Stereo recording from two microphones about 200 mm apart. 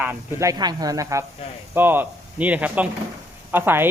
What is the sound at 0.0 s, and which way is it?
Speech, 10° right (ahead or behind).